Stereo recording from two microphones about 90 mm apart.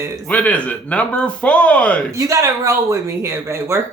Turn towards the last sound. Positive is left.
turn(degrees=-35)  # may be behind; listen again after turning